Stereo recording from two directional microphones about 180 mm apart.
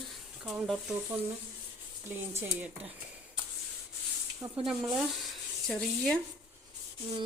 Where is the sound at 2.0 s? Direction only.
10° right (ahead or behind).